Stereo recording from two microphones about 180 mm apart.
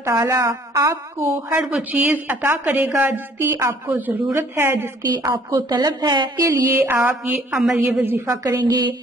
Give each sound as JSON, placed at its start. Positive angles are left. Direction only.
{"t": 0.0, "sound": "a woman's voice", "side_deg": -15}
{"t": 8.6, "sound": "speech", "side_deg": -25}